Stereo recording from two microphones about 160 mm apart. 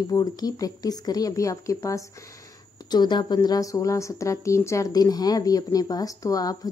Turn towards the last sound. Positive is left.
turn(degrees=25)  # may be behind; listen again after turning